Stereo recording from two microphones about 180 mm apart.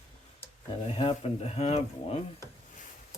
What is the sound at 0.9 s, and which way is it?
Speech, 35° left (ahead or behind).